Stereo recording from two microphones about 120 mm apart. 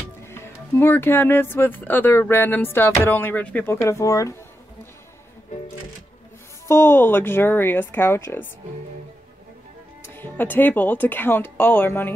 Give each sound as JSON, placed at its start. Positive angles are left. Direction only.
{"t": 0.3, "sound": "speech", "side_deg": 20}
{"t": 6.7, "sound": "speech", "side_deg": 20}
{"t": 10.1, "sound": "speech", "side_deg": 15}